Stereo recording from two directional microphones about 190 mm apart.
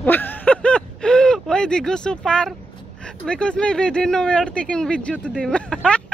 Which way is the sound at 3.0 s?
5° left (ahead or behind).